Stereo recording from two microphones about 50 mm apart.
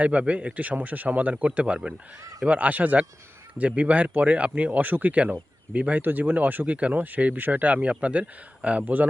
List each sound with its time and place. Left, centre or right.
0.0 s speech: right
8.8 s speech: right